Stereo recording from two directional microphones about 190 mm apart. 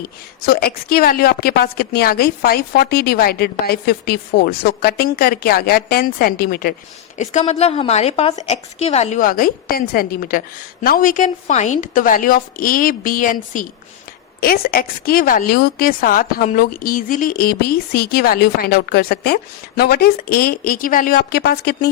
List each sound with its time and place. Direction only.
0.4 s a woman's voice: 55° left (ahead or behind)
7.2 s a woman's voice: 35° left (ahead or behind); by 21.8 s 55° left (ahead or behind)